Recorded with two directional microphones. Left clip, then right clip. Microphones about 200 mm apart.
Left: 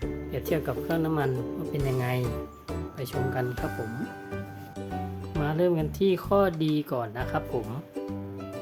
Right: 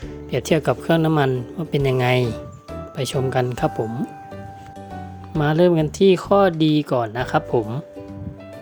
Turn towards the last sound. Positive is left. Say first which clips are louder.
# right 10 dB
turn(degrees=-40)  # may be behind; listen again after turning